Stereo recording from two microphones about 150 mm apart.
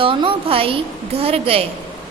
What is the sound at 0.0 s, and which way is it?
A woman's voice, 35° right (ahead or behind).